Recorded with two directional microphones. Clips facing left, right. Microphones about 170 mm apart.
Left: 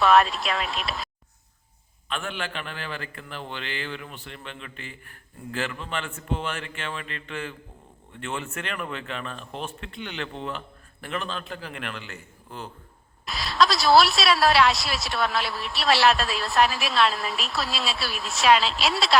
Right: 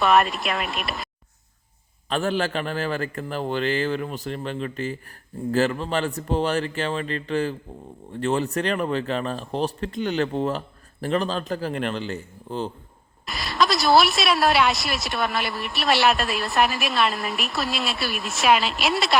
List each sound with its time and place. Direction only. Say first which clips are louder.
0.0 s a woman's voice: even; centre (ahead or behind)
2.0 s a man's voice: right 9 dB; 40° right (ahead or behind)
13.2 s a woman's voice: even; centre (ahead or behind)